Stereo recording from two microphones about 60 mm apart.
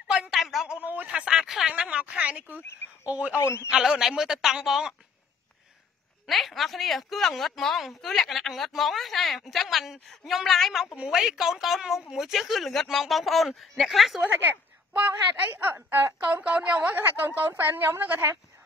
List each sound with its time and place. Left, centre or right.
0.3 s a sound: centre
0.7 s a sound: right
1.1 s a man's voice: centre
3.3 s a man's voice: left
3.7 s a man's voice: centre
6.2 s a woman's voice: centre
15.0 s a woman's voice: right
16.8 s a woman's voice: right